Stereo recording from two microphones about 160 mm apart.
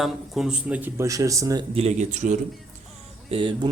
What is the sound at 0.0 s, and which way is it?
Speech, 5° right (ahead or behind).